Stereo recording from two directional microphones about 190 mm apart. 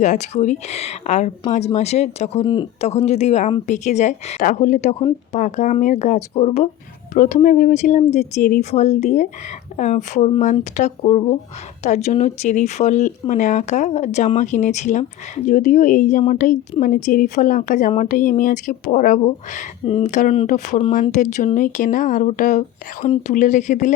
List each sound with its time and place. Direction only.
0.0 s a woman's voice: 40° left (ahead or behind)